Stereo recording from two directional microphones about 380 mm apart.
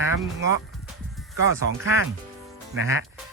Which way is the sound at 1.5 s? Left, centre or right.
Left.